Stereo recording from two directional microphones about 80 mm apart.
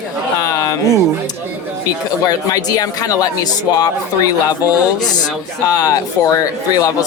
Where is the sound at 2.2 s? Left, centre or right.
Left.